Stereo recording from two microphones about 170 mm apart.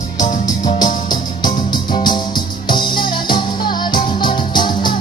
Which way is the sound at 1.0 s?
25° left (ahead or behind).